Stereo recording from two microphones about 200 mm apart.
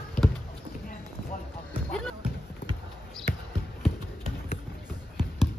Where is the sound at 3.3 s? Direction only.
45° left (ahead or behind).